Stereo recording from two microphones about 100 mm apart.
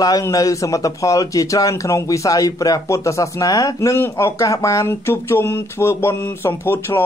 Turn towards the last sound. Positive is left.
turn(degrees=25)  # may be behind; listen again after turning